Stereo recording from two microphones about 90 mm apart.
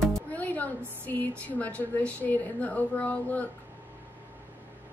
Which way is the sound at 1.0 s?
20° left (ahead or behind).